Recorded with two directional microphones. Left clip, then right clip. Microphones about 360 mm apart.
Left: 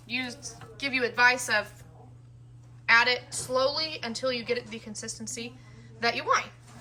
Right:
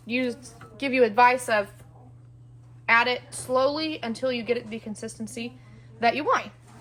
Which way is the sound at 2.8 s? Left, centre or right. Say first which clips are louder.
Right 1 dB; centre.